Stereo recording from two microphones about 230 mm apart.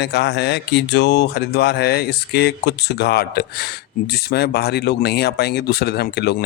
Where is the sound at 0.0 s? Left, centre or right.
Left.